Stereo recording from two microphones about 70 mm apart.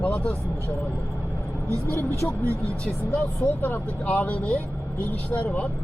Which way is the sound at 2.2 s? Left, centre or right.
Left.